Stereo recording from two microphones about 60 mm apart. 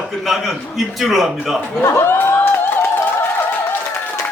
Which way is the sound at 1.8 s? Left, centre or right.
Left.